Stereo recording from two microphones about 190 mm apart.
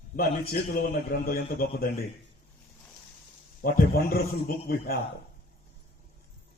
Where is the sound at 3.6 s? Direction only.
50° left (ahead or behind).